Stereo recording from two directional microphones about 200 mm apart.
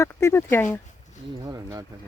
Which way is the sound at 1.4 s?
15° right (ahead or behind).